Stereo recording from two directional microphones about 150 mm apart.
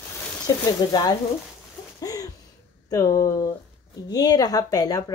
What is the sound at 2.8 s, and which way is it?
Speech, 25° left (ahead or behind).